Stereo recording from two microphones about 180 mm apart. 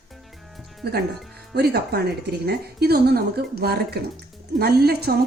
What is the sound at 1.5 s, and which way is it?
Speech, 65° right (ahead or behind).